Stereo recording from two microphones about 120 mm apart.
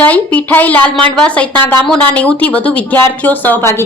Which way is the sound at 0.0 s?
10° left (ahead or behind).